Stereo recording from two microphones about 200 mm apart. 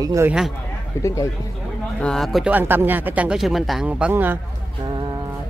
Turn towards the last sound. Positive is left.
turn(degrees=-10)  # may be behind; listen again after turning